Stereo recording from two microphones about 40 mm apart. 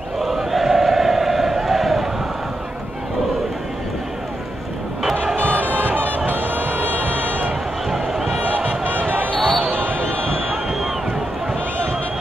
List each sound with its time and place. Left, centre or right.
0.2 s crowd: centre
5.1 s music: right
7.9 s a sound: centre
8.5 s basketball bounce: right
9.5 s basketball bounce: right
9.8 s basketball bounce: right
10.5 s run: centre